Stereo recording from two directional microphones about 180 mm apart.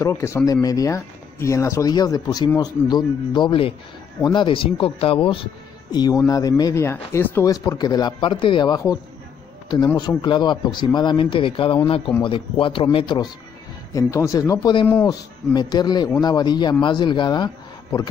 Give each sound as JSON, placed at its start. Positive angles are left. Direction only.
{"t": 0.0, "sound": "speech", "side_deg": 15}